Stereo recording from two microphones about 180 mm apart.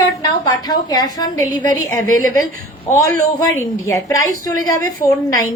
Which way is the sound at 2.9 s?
15° left (ahead or behind).